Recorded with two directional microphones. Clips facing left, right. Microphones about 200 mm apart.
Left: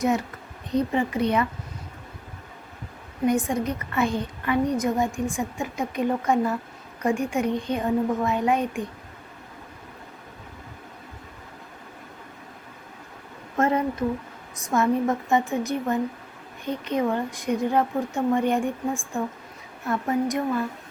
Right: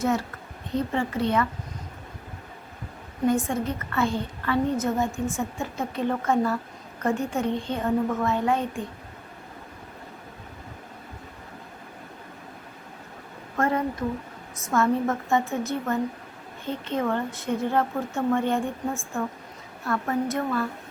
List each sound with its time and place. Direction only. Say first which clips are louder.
0.0 s a woman's voice: left 1 dB; 15° left (ahead or behind)
3.2 s a woman's voice: left 1 dB; 15° left (ahead or behind)
13.6 s a woman's voice: left 2 dB; 20° left (ahead or behind)